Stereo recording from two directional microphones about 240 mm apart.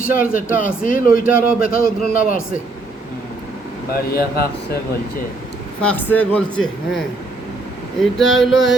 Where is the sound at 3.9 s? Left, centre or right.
Left.